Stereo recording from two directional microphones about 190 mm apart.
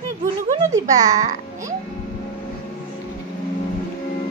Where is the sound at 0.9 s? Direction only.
40° right (ahead or behind).